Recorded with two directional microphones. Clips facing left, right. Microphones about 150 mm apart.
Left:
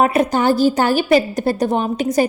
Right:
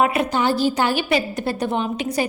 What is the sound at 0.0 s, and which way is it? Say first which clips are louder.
A woman's voice: left 4 dB; 40° left (ahead or behind).